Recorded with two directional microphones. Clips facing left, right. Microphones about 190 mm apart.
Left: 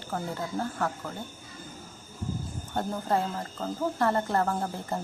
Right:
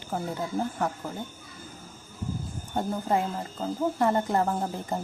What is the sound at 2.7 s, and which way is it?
Speech, 10° right (ahead or behind).